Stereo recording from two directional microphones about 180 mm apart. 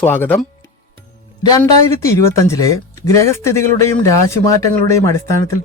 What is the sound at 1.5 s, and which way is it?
Speech, 20° left (ahead or behind).